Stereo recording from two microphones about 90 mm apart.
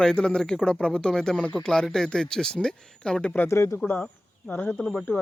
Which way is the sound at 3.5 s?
35° left (ahead or behind).